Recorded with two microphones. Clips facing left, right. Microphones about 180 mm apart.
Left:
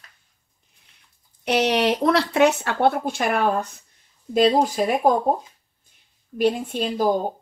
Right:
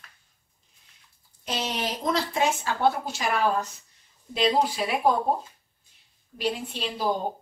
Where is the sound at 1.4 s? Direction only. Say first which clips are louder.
Left 11 dB; 70° left (ahead or behind); by 5.1 s 45° left (ahead or behind).